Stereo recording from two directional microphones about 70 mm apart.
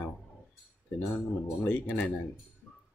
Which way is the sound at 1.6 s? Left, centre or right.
Left.